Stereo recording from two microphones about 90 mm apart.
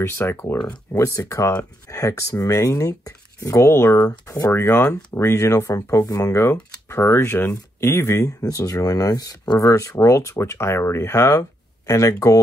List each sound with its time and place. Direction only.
0.0 s speech: 25° left (ahead or behind)
0.9 s speech: 35° left (ahead or behind)